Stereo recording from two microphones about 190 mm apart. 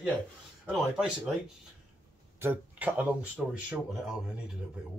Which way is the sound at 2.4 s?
10° right (ahead or behind).